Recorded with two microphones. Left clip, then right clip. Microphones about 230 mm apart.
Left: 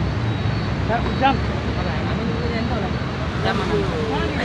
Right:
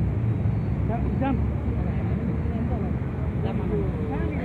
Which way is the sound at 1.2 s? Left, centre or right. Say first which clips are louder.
Left 12 dB; right.